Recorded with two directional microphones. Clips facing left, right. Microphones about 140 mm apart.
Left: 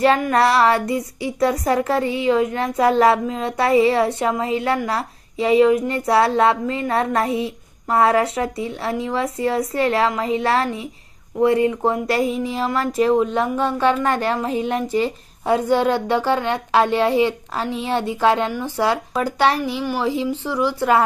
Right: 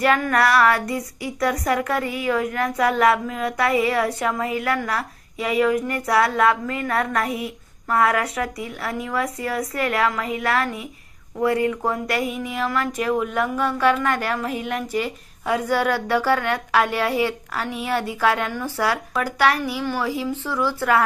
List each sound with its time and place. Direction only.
0.2 s female singing: 25° left (ahead or behind)